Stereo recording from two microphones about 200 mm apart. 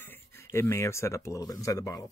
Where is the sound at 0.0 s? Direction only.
10° left (ahead or behind).